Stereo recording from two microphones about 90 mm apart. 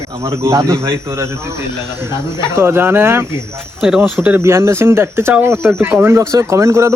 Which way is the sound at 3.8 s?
5° right (ahead or behind).